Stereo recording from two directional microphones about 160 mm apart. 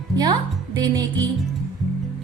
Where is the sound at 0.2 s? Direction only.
25° right (ahead or behind).